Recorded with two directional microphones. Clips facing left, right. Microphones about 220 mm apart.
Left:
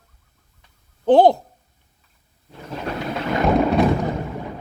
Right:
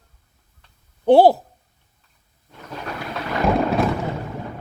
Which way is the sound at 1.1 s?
5° right (ahead or behind).